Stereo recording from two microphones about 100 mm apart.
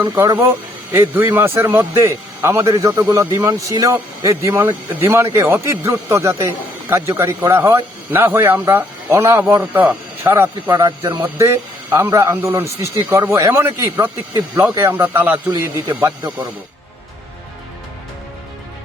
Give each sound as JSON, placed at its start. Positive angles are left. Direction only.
{"t": 0.0, "sound": "speech", "side_deg": -40}
{"t": 0.9, "sound": "a man's voice", "side_deg": -20}